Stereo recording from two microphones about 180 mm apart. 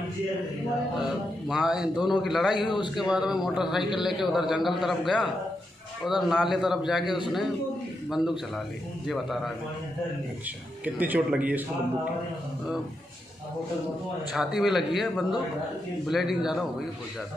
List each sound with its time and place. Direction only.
1.5 s a man's voice: 5° right (ahead or behind)
2.5 s a man's voice: 25° left (ahead or behind)
3.0 s a man's voice: 5° right (ahead or behind)
9.0 s a man's voice: centre (ahead or behind)
11.0 s a man's voice: 10° right (ahead or behind)
14.3 s a man's voice: 5° right (ahead or behind)